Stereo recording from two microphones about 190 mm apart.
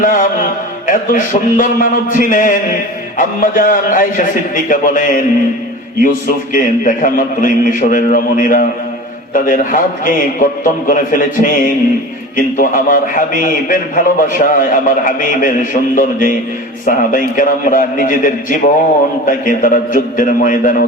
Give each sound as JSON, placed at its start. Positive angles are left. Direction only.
{"t": 0.0, "sound": "music", "side_deg": 45}
{"t": 3.2, "sound": "a man's voice", "side_deg": 45}